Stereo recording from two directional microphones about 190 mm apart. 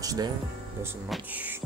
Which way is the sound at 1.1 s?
10° right (ahead or behind).